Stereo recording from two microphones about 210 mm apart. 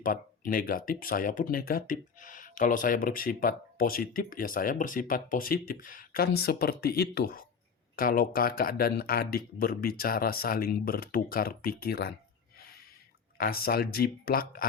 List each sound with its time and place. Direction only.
0.0 s speech: 40° left (ahead or behind)
13.4 s speech: 45° left (ahead or behind)